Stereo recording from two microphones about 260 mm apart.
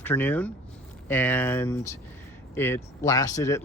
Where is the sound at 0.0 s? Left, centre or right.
Centre.